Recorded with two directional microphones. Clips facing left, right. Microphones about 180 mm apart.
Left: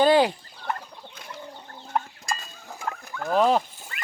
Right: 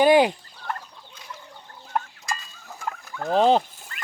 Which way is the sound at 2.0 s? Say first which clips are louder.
Even; centre (ahead or behind).